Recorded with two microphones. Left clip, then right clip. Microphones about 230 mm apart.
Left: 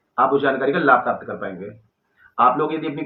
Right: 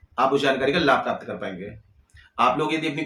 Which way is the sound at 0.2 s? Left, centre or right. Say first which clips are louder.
Left 3 dB; right.